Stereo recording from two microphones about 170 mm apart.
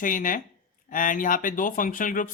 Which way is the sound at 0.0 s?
50° left (ahead or behind).